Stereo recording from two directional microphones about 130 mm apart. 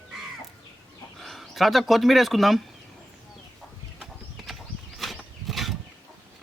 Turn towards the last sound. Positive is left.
turn(degrees=0)  # may be behind; listen again after turning